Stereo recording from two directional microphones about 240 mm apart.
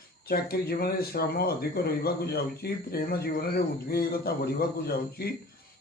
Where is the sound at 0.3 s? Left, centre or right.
Left.